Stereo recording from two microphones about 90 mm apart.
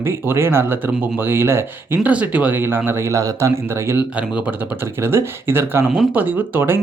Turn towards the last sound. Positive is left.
turn(degrees=-25)  # may be behind; listen again after turning